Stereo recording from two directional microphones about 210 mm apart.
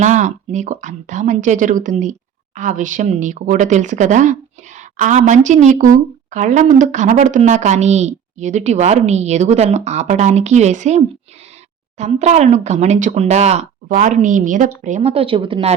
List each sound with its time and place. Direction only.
0.0 s speech: 35° right (ahead or behind)